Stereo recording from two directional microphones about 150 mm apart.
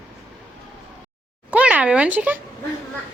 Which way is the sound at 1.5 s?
10° right (ahead or behind).